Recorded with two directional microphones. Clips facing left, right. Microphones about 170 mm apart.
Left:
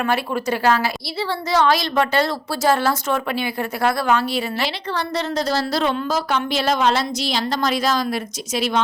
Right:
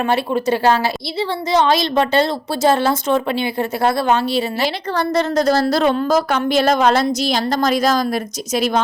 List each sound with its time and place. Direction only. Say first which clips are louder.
0.0 s a woman's voice: right 4 dB; 25° right (ahead or behind)
4.6 s a woman's voice: right 5 dB; 45° right (ahead or behind)